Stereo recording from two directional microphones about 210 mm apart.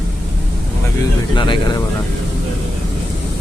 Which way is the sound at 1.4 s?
25° left (ahead or behind).